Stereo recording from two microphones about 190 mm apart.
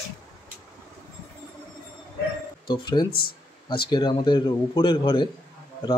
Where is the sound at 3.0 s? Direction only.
55° left (ahead or behind).